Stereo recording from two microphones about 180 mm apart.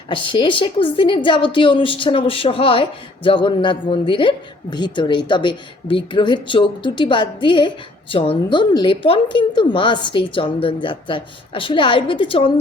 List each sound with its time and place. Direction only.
0.1 s a woman's voice: 30° left (ahead or behind)